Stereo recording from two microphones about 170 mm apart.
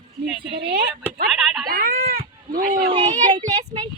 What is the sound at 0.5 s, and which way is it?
Speech, 60° right (ahead or behind).